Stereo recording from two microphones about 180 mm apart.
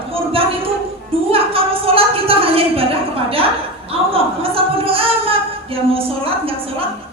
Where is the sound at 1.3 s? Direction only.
30° right (ahead or behind).